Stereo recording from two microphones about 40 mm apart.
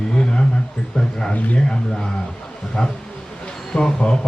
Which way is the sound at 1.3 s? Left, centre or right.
Left.